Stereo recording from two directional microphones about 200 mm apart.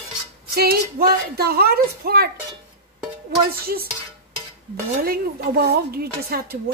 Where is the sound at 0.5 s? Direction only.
50° right (ahead or behind).